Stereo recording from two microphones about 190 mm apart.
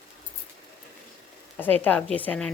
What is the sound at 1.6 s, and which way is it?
Speech, 10° left (ahead or behind).